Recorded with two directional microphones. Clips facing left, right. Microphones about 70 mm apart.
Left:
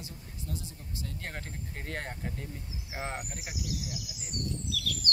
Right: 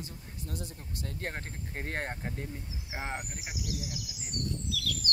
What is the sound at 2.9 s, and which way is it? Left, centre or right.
Speech, centre.